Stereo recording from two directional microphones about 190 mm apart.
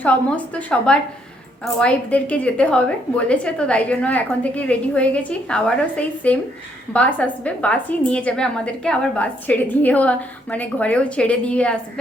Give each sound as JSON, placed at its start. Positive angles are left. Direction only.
{"t": 0.0, "sound": "a woman's voice", "side_deg": 5}